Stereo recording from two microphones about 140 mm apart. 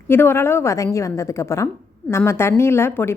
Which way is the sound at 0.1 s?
15° left (ahead or behind).